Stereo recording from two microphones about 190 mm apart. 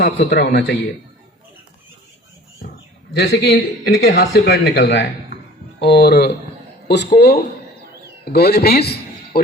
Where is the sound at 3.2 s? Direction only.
65° left (ahead or behind).